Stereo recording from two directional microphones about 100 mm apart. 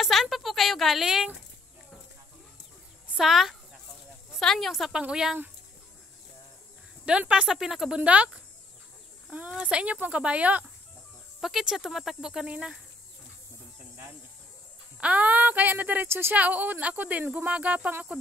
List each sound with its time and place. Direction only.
0.0 s speech: centre (ahead or behind)
3.2 s speech: centre (ahead or behind)
7.1 s speech: 10° right (ahead or behind)
11.4 s speech: 5° right (ahead or behind)
15.0 s speech: 15° right (ahead or behind)